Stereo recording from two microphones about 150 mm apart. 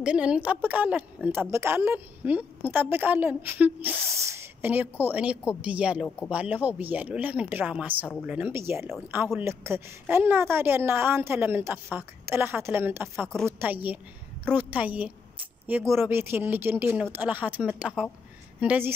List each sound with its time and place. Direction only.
0.0 s a woman's voice: 5° right (ahead or behind)